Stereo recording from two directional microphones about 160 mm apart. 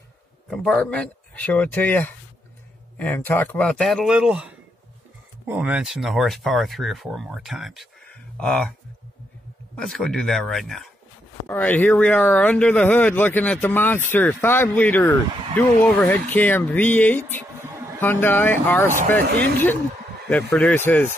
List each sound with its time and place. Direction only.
0.5 s speech: centre (ahead or behind)
9.8 s speech: 5° left (ahead or behind)
17.6 s a sound: 15° right (ahead or behind)
18.0 s speech: 15° left (ahead or behind)
19.2 s speech: 80° right
20.2 s speech: 10° left (ahead or behind)